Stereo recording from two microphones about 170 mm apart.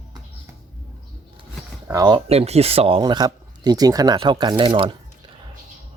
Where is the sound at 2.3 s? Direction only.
35° right (ahead or behind).